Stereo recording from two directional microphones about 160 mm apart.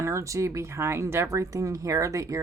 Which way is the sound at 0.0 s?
20° right (ahead or behind).